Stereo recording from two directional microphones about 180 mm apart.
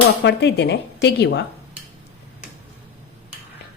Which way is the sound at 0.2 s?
70° left (ahead or behind).